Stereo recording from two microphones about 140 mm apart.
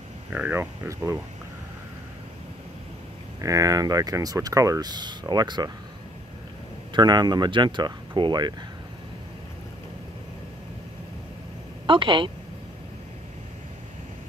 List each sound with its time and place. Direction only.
0.3 s speech: 10° right (ahead or behind)
3.3 s speech: 25° right (ahead or behind)
6.9 s speech: 30° right (ahead or behind)
11.8 s a woman's voice: 35° right (ahead or behind)